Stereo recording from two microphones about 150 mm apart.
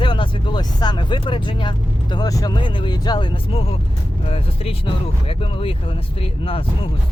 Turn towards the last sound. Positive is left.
turn(degrees=35)  # may be behind; listen again after turning